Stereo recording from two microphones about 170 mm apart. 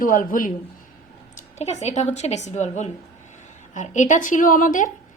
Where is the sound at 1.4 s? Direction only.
40° left (ahead or behind).